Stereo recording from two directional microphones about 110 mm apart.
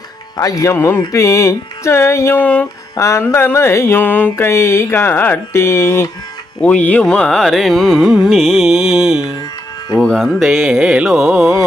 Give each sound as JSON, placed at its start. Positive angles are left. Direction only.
{"t": 0.3, "sound": "mantra", "side_deg": 30}
{"t": 6.6, "sound": "carnatic music", "side_deg": 10}